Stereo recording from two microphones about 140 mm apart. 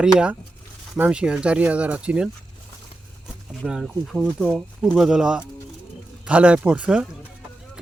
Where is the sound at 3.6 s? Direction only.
Centre (ahead or behind).